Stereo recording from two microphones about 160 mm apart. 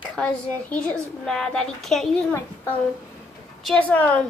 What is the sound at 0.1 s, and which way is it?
A woman's voice, 5° left (ahead or behind).